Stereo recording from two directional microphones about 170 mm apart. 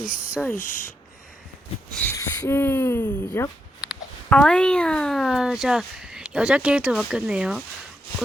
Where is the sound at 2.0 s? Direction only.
15° left (ahead or behind).